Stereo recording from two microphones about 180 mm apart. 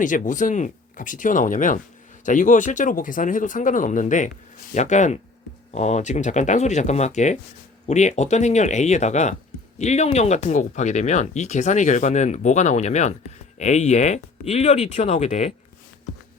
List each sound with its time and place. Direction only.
0.0 s speech: 45° left (ahead or behind)